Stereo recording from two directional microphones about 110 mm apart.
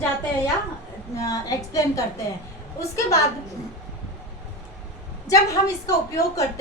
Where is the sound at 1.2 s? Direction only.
30° left (ahead or behind).